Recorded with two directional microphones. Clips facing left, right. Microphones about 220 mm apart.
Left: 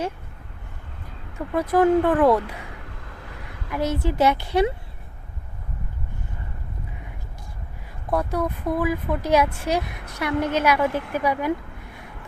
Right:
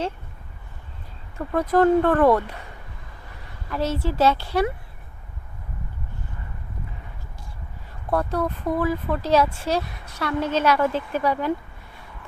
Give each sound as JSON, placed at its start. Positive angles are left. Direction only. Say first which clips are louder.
{"t": 1.7, "sound": "speech", "louder": "even", "side_deg": 10}
{"t": 3.0, "sound": "vehicle", "louder": "left 5 dB", "side_deg": 90}
{"t": 3.7, "sound": "speech", "louder": "left 1 dB", "side_deg": 15}
{"t": 8.1, "sound": "speech", "louder": "even", "side_deg": 10}